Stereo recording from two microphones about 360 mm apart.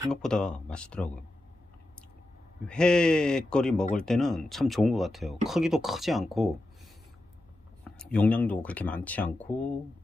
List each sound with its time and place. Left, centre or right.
0.1 s speech: centre
2.7 s speech: centre
8.0 s speech: centre